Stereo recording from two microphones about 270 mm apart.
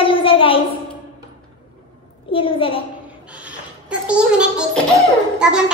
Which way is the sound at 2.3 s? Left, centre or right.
Centre.